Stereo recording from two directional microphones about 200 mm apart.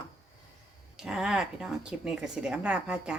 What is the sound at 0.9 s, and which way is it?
Speech, centre (ahead or behind).